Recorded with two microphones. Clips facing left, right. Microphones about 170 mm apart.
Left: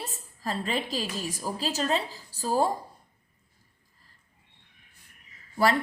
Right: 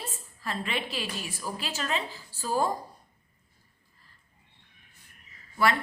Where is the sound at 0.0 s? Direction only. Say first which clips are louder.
Left 3 dB; 40° left (ahead or behind).